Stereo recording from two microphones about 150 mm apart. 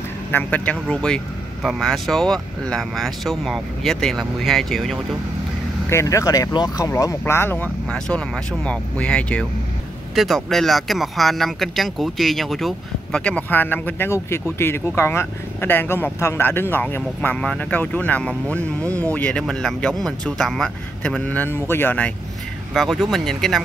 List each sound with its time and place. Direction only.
0.3 s speech: 10° left (ahead or behind)
5.9 s speech: 20° left (ahead or behind)
22.8 s speech: centre (ahead or behind)